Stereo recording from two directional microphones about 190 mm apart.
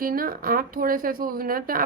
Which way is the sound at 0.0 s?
50° right (ahead or behind).